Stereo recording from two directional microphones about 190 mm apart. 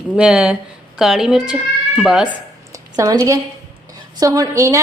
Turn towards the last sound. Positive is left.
turn(degrees=-15)  # may be behind; listen again after turning